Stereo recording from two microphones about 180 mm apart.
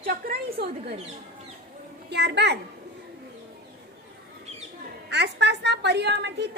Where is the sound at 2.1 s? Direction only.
70° right (ahead or behind).